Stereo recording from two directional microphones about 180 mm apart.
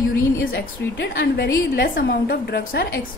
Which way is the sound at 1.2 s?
65° left (ahead or behind).